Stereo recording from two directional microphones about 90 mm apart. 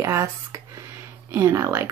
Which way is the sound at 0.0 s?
30° right (ahead or behind).